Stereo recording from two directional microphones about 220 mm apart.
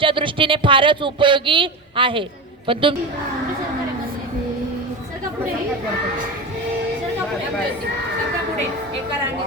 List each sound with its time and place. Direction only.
0.0 s speech: 25° right (ahead or behind)